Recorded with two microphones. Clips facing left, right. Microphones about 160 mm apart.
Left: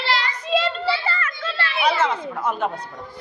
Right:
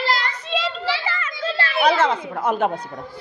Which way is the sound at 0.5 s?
Centre (ahead or behind).